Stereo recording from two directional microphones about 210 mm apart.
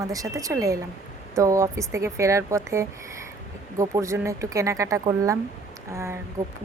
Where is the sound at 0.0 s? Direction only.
15° right (ahead or behind).